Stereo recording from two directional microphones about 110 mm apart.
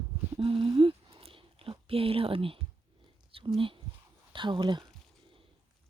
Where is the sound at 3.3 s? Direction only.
50° right (ahead or behind).